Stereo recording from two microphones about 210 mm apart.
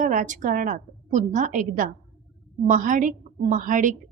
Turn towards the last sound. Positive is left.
turn(degrees=-40)  # may be behind; listen again after turning